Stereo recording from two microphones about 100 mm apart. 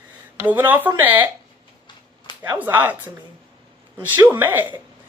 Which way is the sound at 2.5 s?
20° right (ahead or behind).